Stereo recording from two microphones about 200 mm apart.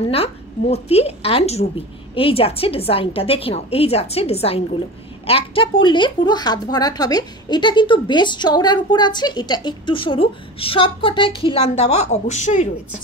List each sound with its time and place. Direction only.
0.0 s a woman's voice: 30° left (ahead or behind)